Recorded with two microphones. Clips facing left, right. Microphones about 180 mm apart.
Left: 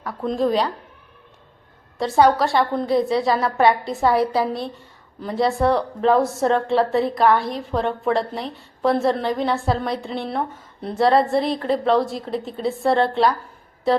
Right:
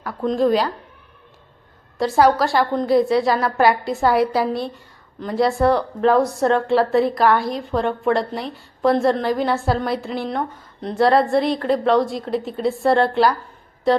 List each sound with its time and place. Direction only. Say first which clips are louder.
0.0 s a woman's voice: right 3 dB; centre (ahead or behind)
2.0 s a woman's voice: right 1 dB; centre (ahead or behind)